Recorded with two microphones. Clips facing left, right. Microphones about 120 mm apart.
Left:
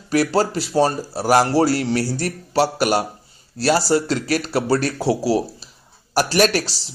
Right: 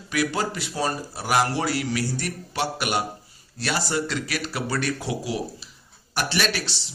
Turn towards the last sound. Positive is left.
turn(degrees=40)  # may be behind; listen again after turning